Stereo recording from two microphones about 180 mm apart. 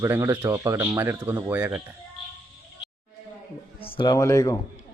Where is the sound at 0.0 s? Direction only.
15° right (ahead or behind).